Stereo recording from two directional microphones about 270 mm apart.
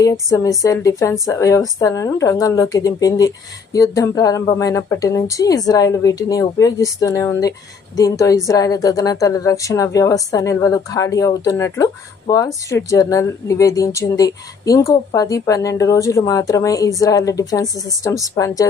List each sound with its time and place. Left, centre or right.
0.0 s a woman's voice: centre